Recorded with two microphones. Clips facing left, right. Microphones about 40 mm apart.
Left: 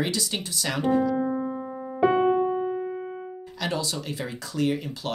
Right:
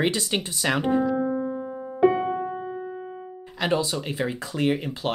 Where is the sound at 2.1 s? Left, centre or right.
Left.